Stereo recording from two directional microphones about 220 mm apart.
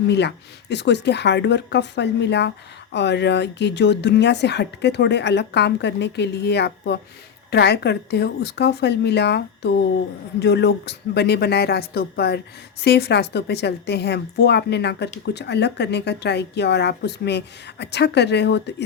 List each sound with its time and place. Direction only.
0.1 s a woman's voice: 50° left (ahead or behind)